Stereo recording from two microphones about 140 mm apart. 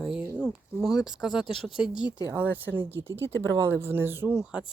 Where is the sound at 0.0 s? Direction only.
10° right (ahead or behind).